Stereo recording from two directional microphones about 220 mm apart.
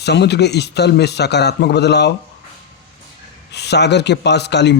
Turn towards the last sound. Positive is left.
turn(degrees=50)  # may be behind; listen again after turning